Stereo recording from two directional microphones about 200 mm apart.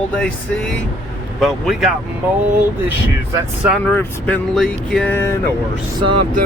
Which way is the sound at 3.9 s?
5° left (ahead or behind).